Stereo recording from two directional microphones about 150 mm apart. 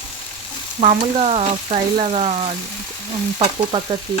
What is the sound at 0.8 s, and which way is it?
Frying, 45° right (ahead or behind).